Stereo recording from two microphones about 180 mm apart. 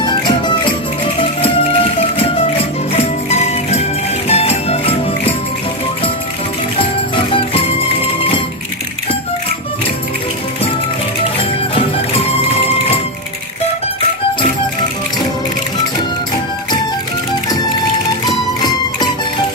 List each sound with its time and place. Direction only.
0.0 s music: 25° left (ahead or behind)
2.9 s music: 35° left (ahead or behind)